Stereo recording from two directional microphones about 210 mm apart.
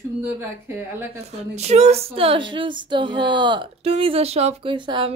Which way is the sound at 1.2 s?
30° right (ahead or behind).